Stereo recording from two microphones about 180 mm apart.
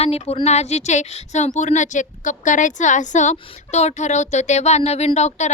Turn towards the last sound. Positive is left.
turn(degrees=40)  # may be behind; listen again after turning